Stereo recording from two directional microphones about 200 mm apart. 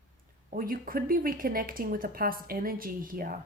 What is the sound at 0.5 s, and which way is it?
Speech, 45° right (ahead or behind).